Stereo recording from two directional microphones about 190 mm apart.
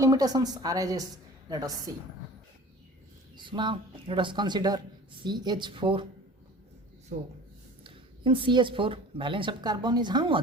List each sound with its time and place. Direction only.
0.0 s a woman's voice: 20° right (ahead or behind)
3.3 s a woman's voice: 25° right (ahead or behind)
7.9 s a woman's voice: 25° right (ahead or behind)